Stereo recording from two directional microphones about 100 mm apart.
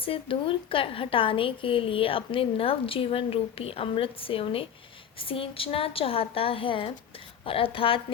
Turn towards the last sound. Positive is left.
turn(degrees=65)  # may be behind; listen again after turning